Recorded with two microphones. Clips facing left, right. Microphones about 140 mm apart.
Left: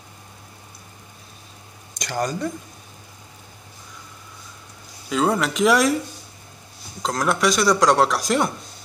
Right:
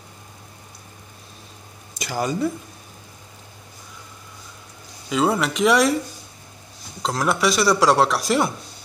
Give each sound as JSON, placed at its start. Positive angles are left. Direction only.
{"t": 2.0, "sound": "speech", "side_deg": -5}
{"t": 5.1, "sound": "speech", "side_deg": 0}
{"t": 7.0, "sound": "speech", "side_deg": 0}